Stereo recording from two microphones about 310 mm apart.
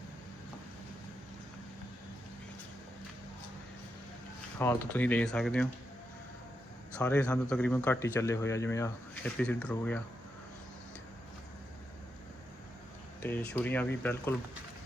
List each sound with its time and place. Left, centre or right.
4.6 s speech: centre
6.9 s speech: centre
13.2 s speech: centre